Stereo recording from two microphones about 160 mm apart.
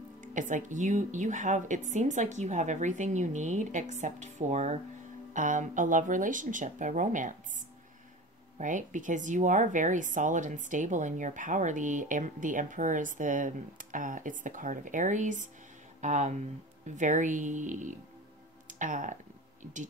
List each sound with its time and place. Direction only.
0.2 s speech: 55° right (ahead or behind)